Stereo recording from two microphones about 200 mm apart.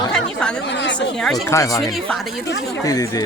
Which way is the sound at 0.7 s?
60° left (ahead or behind).